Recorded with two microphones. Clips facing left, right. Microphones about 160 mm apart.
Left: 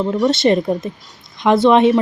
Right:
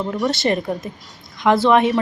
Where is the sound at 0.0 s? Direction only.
20° left (ahead or behind).